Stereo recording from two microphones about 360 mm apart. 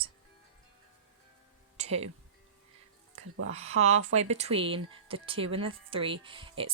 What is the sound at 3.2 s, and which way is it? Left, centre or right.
Speech, right.